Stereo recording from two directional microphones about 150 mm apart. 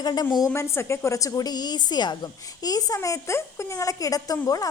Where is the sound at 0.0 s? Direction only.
30° left (ahead or behind).